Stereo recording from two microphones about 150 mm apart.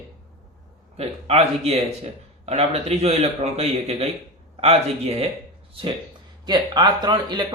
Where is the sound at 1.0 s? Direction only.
45° right (ahead or behind).